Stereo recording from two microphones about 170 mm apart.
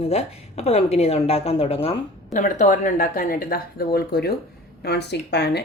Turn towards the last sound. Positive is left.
turn(degrees=75)  # may be behind; listen again after turning